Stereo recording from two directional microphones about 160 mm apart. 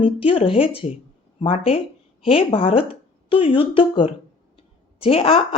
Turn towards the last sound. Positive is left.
turn(degrees=35)  # may be behind; listen again after turning